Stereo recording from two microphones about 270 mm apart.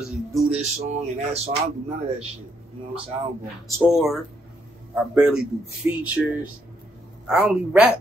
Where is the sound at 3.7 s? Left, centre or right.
Centre.